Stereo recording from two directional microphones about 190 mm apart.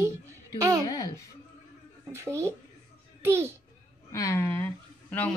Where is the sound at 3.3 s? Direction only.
10° right (ahead or behind).